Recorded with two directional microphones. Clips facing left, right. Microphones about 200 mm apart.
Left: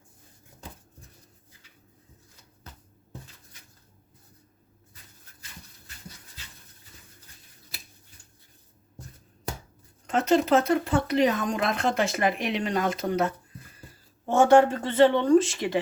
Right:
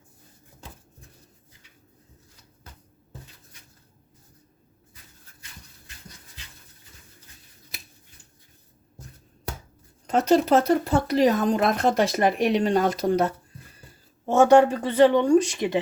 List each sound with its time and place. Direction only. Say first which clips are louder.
10.1 s speech: right 2 dB; 40° right (ahead or behind)
14.3 s speech: right 2 dB; 15° right (ahead or behind)